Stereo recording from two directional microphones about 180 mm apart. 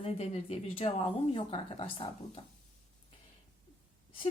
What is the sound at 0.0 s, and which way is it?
Speech, 35° left (ahead or behind).